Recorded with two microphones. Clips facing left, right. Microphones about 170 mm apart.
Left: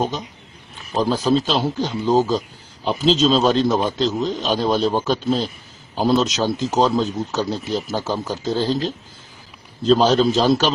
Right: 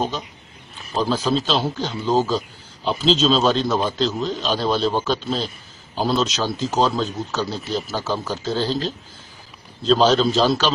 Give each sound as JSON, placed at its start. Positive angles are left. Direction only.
{"t": 0.9, "sound": "speech", "side_deg": 15}
{"t": 3.6, "sound": "speech", "side_deg": 20}